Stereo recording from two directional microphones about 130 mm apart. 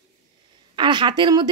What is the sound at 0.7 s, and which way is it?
Speech, 35° right (ahead or behind).